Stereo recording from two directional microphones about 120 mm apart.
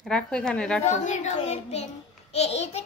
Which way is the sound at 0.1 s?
5° left (ahead or behind).